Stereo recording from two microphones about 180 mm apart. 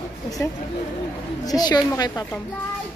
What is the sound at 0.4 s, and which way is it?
A child's voice, 15° left (ahead or behind).